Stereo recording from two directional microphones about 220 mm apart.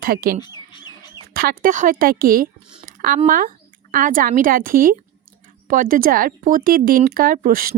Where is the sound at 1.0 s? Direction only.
20° left (ahead or behind).